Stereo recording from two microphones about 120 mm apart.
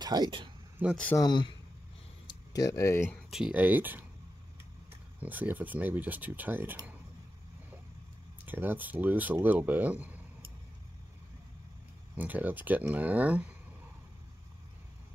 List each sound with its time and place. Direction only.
0.0 s speech: 35° right (ahead or behind)
0.8 s speech: 15° right (ahead or behind)
1.1 s a man's voice: 35° left (ahead or behind)
2.2 s a sound: 30° left (ahead or behind)
3.3 s speech: 5° right (ahead or behind)
3.6 s speech: 15° right (ahead or behind)
5.2 s speech: 15° right (ahead or behind)
8.5 s speech: 15° right (ahead or behind)
12.2 s speech: 15° right (ahead or behind)